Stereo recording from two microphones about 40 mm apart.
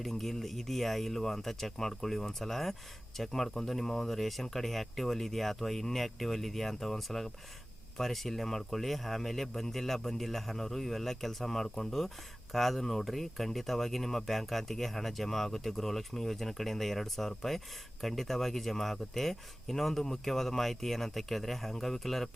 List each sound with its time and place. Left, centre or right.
0.0 s speech: centre